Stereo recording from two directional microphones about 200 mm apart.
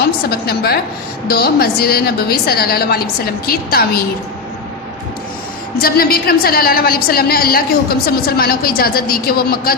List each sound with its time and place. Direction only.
0.0 s a woman's voice: 50° left (ahead or behind)
5.7 s a woman's voice: 50° left (ahead or behind)